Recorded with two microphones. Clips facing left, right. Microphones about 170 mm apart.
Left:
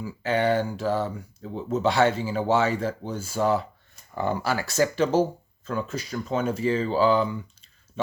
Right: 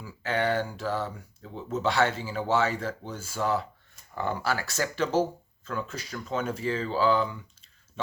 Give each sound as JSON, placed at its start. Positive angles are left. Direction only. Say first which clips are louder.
{"t": 0.0, "sound": "speech", "louder": "left 4 dB", "side_deg": 15}